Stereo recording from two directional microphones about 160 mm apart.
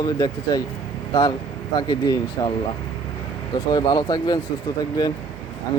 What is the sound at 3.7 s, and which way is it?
Speech, 25° left (ahead or behind).